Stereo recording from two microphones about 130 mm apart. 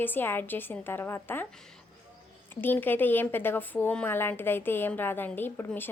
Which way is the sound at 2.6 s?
15° left (ahead or behind).